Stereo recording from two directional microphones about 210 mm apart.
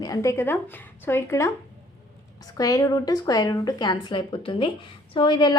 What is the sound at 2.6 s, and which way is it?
A woman's voice, 15° left (ahead or behind).